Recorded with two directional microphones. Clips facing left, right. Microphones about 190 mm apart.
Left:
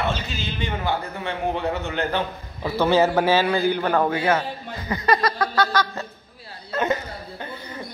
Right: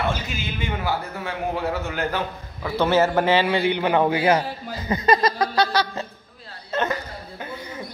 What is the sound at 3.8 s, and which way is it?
Speech, 10° right (ahead or behind).